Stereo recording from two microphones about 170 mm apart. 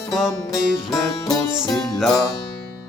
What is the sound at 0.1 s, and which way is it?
Music, centre (ahead or behind).